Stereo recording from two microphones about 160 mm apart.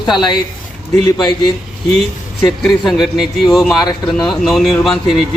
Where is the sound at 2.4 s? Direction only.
Centre (ahead or behind).